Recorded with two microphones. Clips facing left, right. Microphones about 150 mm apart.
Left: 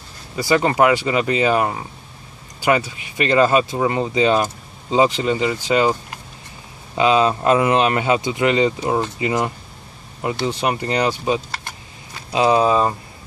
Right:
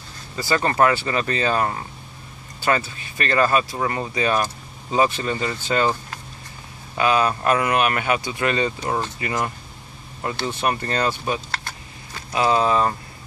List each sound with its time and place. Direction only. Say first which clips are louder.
0.4 s speech: left 3 dB; 15° left (ahead or behind)